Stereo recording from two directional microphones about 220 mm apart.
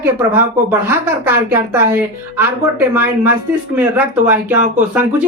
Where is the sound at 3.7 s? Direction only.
5° right (ahead or behind).